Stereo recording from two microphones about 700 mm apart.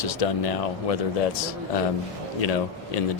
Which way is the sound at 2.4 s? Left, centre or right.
Left.